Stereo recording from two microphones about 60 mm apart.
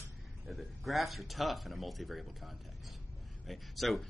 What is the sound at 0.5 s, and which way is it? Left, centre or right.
Speech, centre.